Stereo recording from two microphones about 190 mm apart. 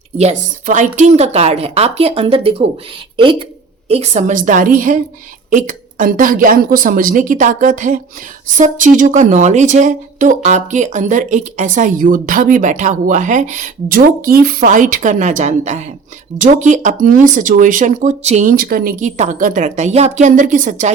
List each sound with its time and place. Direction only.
0.2 s a woman's voice: 40° right (ahead or behind)